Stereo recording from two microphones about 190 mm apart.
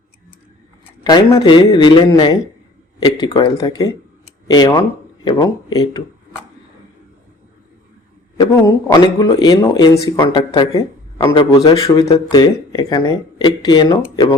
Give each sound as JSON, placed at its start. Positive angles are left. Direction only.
{"t": 1.0, "sound": "speech", "side_deg": 20}
{"t": 8.4, "sound": "speech", "side_deg": 20}